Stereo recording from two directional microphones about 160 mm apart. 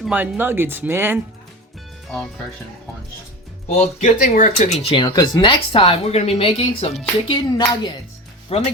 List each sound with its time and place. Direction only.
0.0 s speech: 10° right (ahead or behind)
3.7 s speech: 45° left (ahead or behind)
4.9 s speech: 25° left (ahead or behind)
7.3 s speech: 25° left (ahead or behind)
8.5 s speech: 40° left (ahead or behind)